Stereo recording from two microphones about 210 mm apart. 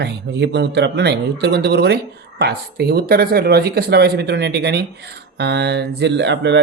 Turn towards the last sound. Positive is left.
turn(degrees=-55)  # may be behind; listen again after turning